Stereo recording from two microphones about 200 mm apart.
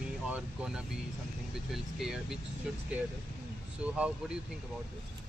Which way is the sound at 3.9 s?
5° right (ahead or behind).